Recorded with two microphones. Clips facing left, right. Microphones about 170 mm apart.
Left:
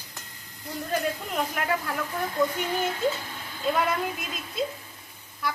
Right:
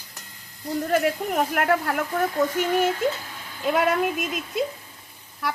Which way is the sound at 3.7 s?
80° right.